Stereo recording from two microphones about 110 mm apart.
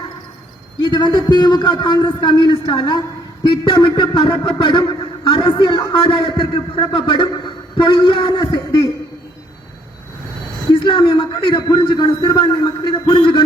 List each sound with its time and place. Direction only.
0.8 s a man's voice: 40° left (ahead or behind)
10.7 s a man's voice: 50° left (ahead or behind)